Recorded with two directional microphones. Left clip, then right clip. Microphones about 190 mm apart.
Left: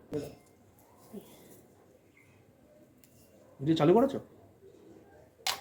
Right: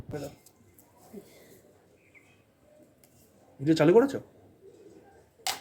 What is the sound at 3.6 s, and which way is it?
Speech, 50° right (ahead or behind).